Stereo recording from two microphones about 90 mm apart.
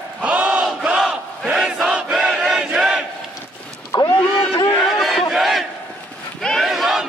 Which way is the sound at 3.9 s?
50° left (ahead or behind).